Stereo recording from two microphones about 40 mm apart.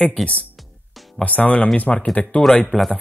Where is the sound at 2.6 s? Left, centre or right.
Centre.